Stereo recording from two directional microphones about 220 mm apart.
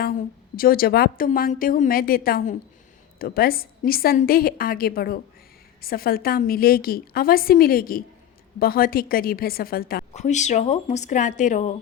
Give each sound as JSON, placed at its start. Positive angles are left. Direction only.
{"t": 0.5, "sound": "a woman's voice", "side_deg": 40}